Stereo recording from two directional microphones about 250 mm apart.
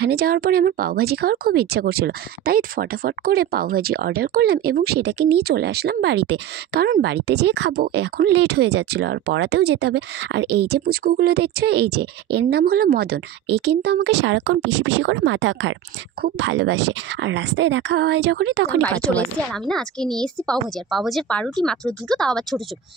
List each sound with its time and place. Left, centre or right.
0.0 s a woman's voice: right
18.8 s a woman's voice: centre